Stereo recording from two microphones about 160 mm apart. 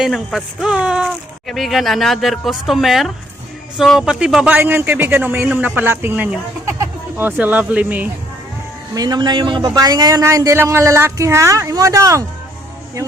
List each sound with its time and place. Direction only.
0.0 s a man's voice: centre (ahead or behind)
9.0 s a man's voice: 25° right (ahead or behind)